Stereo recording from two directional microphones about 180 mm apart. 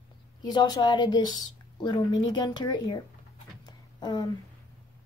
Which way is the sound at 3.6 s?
25° left (ahead or behind).